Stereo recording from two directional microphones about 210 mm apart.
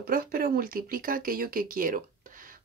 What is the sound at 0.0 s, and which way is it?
Speech, 45° right (ahead or behind).